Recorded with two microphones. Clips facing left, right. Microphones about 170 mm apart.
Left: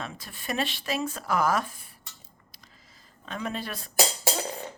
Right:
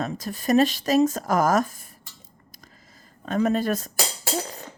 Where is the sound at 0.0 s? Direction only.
40° right (ahead or behind).